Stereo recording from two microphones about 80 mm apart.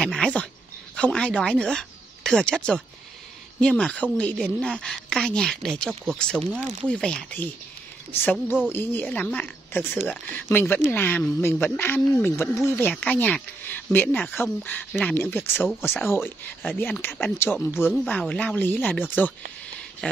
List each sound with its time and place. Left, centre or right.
0.0 s a sound: centre
0.9 s a woman's voice: centre
8.1 s speech: left
12.3 s speech: left
13.0 s speech: centre
18.3 s speech: centre